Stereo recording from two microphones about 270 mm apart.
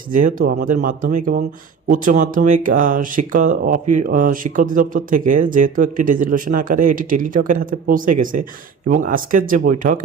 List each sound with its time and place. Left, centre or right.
0.1 s speech: right